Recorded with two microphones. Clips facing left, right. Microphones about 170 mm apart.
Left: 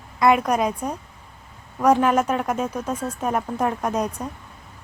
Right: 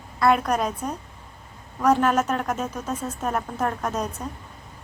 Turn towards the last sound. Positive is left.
turn(degrees=10)  # may be behind; listen again after turning